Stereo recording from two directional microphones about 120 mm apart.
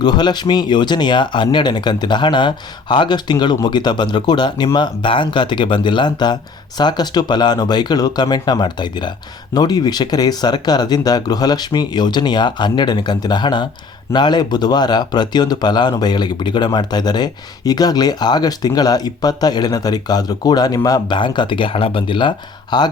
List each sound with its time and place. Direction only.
0.0 s speech: 35° left (ahead or behind)